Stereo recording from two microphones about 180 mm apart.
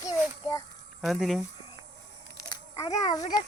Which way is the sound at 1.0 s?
Centre (ahead or behind).